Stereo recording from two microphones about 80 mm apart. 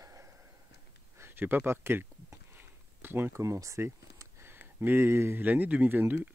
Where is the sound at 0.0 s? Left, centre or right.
Right.